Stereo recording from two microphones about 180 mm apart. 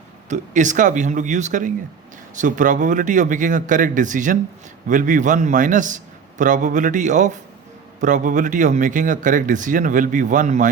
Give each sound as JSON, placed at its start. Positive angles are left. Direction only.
{"t": 0.3, "sound": "speech", "side_deg": -45}